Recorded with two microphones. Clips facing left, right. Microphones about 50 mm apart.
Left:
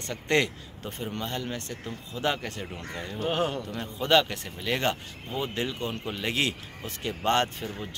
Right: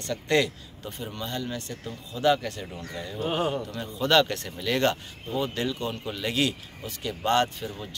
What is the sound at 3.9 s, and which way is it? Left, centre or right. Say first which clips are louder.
Speech: right 1 dB; centre.